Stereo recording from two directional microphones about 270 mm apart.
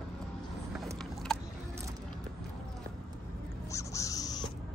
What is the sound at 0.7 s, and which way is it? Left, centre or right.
Vehicle, centre.